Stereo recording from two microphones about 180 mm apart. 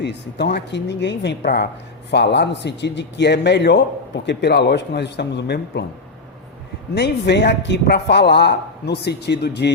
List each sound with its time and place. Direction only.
0.0 s a man's voice: 70° left (ahead or behind)
6.9 s a man's voice: 70° left (ahead or behind)